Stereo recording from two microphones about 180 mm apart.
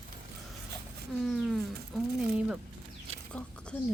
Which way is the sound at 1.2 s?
Centre (ahead or behind).